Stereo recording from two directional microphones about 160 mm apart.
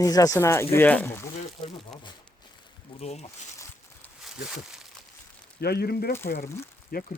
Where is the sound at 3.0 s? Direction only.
40° left (ahead or behind).